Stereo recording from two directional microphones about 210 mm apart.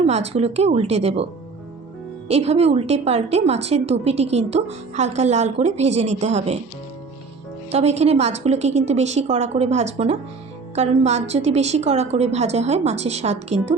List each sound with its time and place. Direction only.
0.0 s a woman's voice: 30° right (ahead or behind)
7.7 s a woman's voice: 30° right (ahead or behind)